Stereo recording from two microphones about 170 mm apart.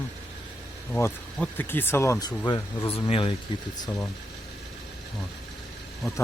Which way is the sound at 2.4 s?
25° left (ahead or behind).